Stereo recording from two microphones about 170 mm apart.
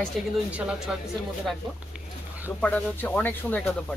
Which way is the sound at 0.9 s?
5° right (ahead or behind).